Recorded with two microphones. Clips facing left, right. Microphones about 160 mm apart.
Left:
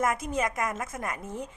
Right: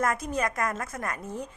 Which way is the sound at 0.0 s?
20° left (ahead or behind).